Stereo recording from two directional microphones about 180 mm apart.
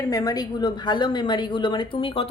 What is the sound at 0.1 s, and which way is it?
A woman's voice, 20° left (ahead or behind).